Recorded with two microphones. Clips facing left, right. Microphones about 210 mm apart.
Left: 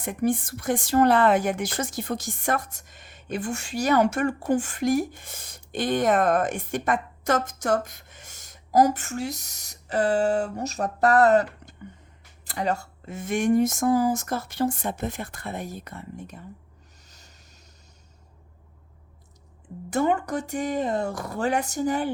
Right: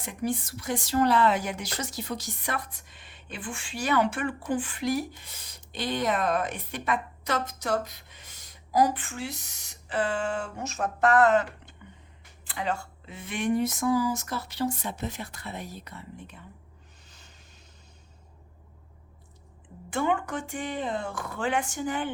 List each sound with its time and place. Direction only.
0.0 s speech: 50° left (ahead or behind)
17.1 s boat: 40° left (ahead or behind)
19.9 s speech: 40° left (ahead or behind)